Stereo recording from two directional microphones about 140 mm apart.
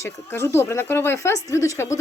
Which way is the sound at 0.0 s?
20° left (ahead or behind).